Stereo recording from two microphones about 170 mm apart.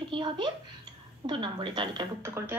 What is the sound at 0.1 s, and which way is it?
A woman's voice, 30° right (ahead or behind).